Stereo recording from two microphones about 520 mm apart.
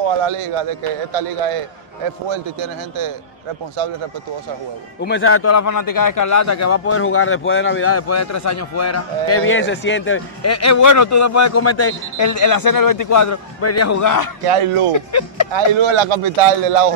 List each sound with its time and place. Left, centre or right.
0.0 s a man's voice: right
5.0 s a man's voice: left
14.4 s speech: right
15.0 s a man's voice: left
15.5 s speech: right